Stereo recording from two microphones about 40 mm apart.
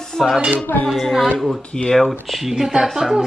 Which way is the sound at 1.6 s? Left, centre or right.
Left.